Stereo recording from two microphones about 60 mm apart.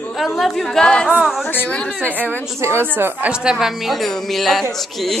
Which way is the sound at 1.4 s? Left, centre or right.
Left.